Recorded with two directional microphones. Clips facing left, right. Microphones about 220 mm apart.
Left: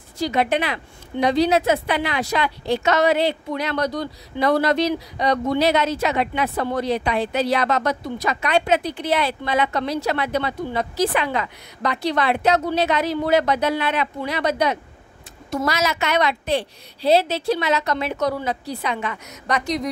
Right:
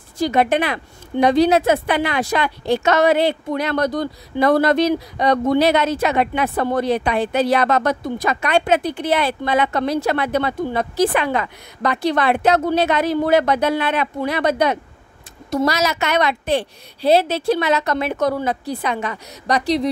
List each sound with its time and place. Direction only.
0.2 s a woman's voice: 50° right (ahead or behind)
15.5 s a woman's voice: 40° right (ahead or behind)